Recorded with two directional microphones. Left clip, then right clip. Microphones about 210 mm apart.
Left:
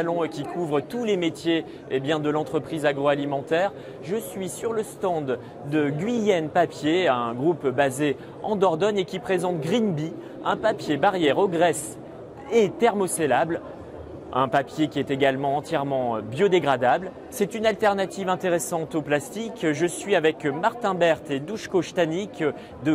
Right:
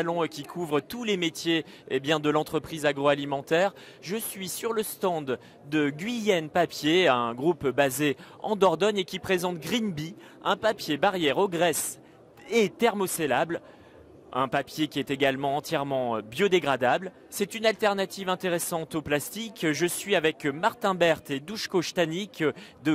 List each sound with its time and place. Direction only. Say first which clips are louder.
0.0 s a man's voice: left 3 dB; 40° right (ahead or behind)